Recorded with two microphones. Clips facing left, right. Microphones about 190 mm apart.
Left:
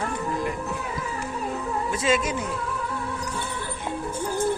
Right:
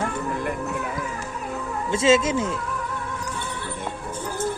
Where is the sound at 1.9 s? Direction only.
25° right (ahead or behind).